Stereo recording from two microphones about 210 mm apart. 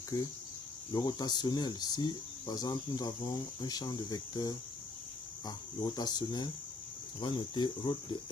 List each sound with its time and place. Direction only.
0.1 s speech: 20° left (ahead or behind)